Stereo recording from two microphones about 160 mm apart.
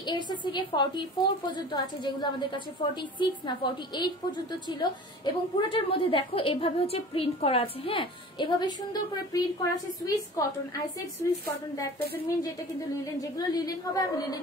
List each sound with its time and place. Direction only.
0.0 s a woman's voice: 30° left (ahead or behind)
13.2 s a woman's voice: 25° left (ahead or behind)